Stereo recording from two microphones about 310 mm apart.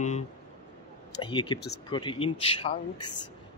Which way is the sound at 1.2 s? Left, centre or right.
Centre.